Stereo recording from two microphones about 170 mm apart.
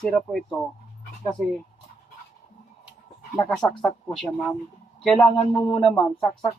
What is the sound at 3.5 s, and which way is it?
Speech, 5° left (ahead or behind).